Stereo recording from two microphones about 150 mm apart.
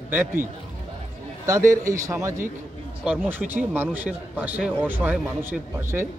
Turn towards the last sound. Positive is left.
turn(degrees=-15)  # may be behind; listen again after turning